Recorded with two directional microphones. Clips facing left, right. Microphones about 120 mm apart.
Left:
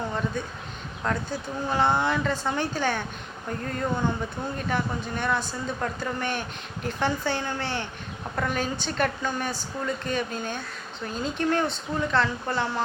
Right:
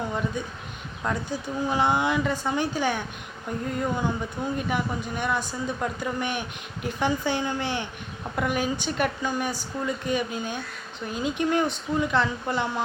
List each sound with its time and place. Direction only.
0.4 s a woman's voice: 15° right (ahead or behind)